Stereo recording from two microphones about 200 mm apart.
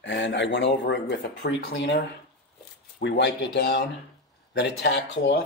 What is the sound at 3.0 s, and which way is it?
Speech, 60° left (ahead or behind).